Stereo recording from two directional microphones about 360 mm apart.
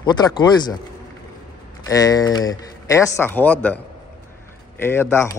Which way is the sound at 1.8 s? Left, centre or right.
Centre.